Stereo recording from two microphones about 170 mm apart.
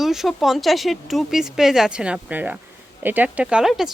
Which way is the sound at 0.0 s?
Centre (ahead or behind).